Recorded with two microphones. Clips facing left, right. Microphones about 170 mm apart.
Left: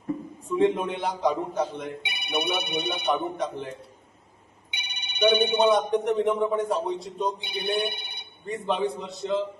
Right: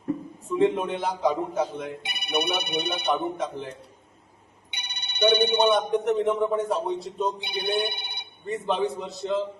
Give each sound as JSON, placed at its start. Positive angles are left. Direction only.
{"t": 0.5, "sound": "speech", "side_deg": -5}
{"t": 4.8, "sound": "telephone bell ringing", "side_deg": -70}
{"t": 5.2, "sound": "speech", "side_deg": 5}
{"t": 7.9, "sound": "telephone", "side_deg": -65}
{"t": 8.4, "sound": "speech", "side_deg": 0}